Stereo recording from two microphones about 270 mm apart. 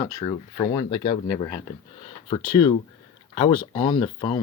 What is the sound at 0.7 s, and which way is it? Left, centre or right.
Speech, centre.